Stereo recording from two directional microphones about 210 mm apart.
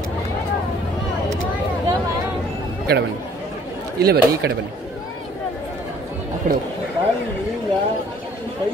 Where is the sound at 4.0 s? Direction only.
50° right (ahead or behind).